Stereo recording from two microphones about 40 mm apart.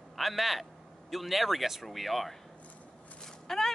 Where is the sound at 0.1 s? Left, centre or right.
Centre.